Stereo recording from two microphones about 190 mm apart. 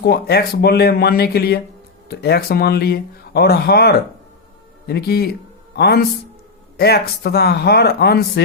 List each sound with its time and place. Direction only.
0.0 s speech: 55° left (ahead or behind)